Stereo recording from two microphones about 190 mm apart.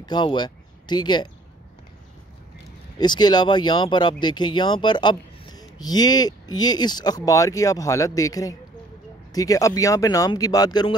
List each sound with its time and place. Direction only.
0.0 s speech: 25° left (ahead or behind)
3.0 s speech: 20° left (ahead or behind)